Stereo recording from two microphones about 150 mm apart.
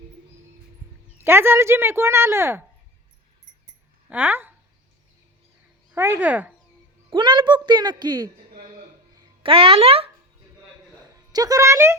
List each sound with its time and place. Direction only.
1.2 s speech: 15° right (ahead or behind)
4.1 s speech: 10° right (ahead or behind)
5.9 s speech: 15° right (ahead or behind)
7.1 s a woman's voice: 30° right (ahead or behind)
9.4 s speech: 40° right (ahead or behind)
11.1 s speech: 25° right (ahead or behind)